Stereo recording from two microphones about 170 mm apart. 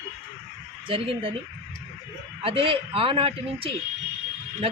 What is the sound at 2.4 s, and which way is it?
Speech, 30° right (ahead or behind).